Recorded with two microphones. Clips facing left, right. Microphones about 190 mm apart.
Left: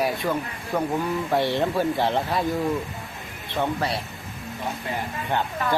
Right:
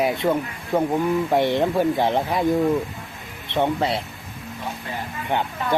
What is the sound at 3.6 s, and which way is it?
Speech, 25° right (ahead or behind).